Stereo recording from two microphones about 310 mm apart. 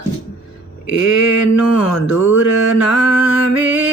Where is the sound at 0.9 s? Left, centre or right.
Left.